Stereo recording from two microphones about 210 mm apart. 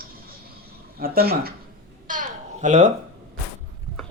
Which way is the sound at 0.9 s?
45° right (ahead or behind).